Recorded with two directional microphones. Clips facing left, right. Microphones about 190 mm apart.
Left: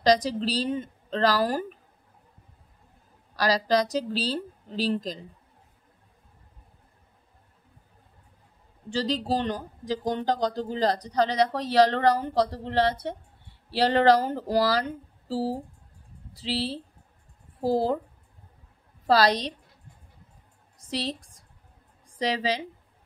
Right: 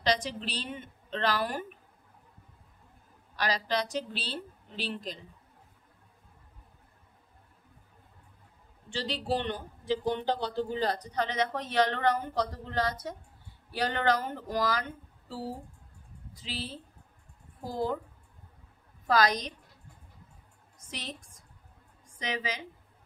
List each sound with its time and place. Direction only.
0.0 s speech: 35° left (ahead or behind)
3.3 s speech: 35° left (ahead or behind)
8.9 s speech: 40° left (ahead or behind)
19.0 s speech: 35° left (ahead or behind)
20.8 s a woman's voice: 35° left (ahead or behind)